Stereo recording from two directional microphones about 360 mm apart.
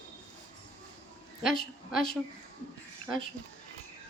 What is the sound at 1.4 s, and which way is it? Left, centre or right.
Speech, centre.